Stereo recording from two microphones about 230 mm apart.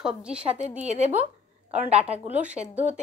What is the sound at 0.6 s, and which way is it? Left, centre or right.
A woman's voice, right.